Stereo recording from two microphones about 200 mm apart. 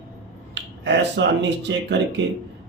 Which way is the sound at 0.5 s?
60° right (ahead or behind).